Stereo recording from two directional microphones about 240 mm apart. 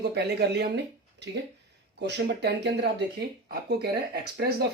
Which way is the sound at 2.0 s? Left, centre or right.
Right.